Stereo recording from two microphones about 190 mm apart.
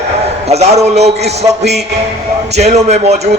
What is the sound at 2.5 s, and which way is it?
Speech, 35° right (ahead or behind).